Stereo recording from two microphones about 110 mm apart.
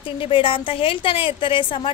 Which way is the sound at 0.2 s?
50° left (ahead or behind).